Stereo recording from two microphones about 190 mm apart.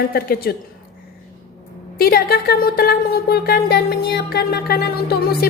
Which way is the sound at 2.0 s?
55° left (ahead or behind).